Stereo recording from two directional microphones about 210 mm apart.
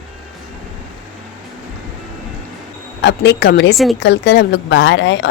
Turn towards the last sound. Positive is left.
turn(degrees=60)  # may be behind; listen again after turning